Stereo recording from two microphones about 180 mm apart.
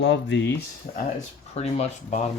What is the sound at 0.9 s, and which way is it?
Speech, 40° left (ahead or behind).